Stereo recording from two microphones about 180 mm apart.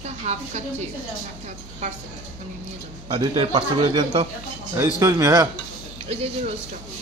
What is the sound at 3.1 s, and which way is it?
A man's voice, 25° right (ahead or behind).